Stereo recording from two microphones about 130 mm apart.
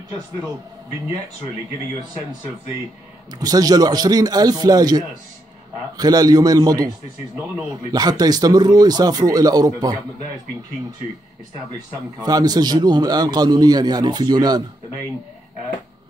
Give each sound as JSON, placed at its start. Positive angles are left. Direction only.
{"t": 3.3, "sound": "speech", "side_deg": -30}
{"t": 7.9, "sound": "a man's voice", "side_deg": -30}
{"t": 12.2, "sound": "a man's voice", "side_deg": -30}